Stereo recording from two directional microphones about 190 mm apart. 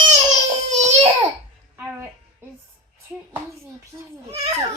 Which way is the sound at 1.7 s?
10° right (ahead or behind).